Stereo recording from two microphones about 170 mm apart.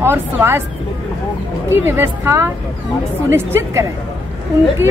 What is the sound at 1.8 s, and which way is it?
A woman's voice, 15° right (ahead or behind).